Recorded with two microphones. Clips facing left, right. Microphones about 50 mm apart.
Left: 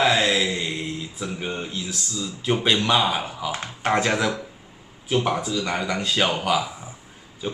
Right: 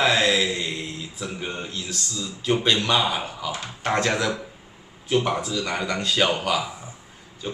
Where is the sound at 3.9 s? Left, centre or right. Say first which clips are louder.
Left 1 dB; centre.